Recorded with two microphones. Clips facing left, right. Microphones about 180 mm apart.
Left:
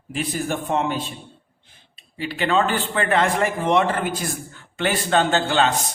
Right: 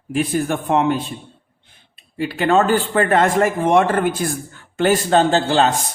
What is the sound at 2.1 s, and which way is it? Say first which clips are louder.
A man's voice: right 5 dB; 45° right (ahead or behind).